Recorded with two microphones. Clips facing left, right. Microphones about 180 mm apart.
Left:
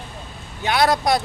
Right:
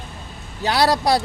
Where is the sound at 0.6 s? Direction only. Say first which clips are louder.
Even; 35° right (ahead or behind).